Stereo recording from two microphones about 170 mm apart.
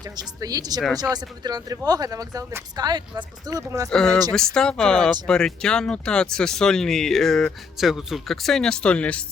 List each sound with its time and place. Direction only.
0.3 s speech: 20° right (ahead or behind)
3.8 s speech: 5° left (ahead or behind)